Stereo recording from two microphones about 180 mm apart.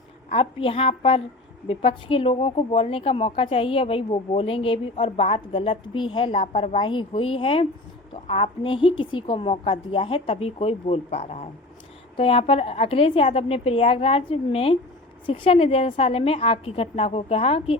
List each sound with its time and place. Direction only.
0.3 s speech: 30° left (ahead or behind)